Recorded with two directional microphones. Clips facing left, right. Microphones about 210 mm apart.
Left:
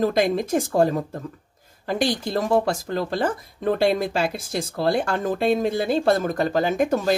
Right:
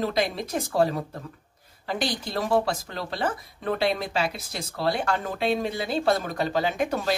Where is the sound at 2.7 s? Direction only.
50° left (ahead or behind).